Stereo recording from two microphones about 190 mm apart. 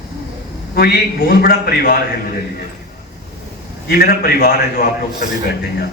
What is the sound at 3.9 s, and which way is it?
A man's voice, 55° left (ahead or behind).